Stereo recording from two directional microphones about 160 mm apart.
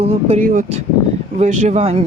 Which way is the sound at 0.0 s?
40° right (ahead or behind).